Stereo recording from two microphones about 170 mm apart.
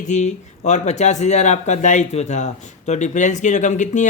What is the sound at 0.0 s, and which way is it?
Speech, 45° left (ahead or behind).